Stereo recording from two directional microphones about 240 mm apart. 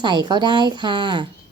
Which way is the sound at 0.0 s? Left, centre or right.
Centre.